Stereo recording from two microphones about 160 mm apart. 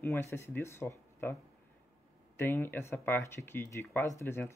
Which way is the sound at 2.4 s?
15° left (ahead or behind).